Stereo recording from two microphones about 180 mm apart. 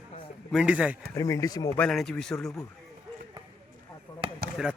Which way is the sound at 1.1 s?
20° left (ahead or behind).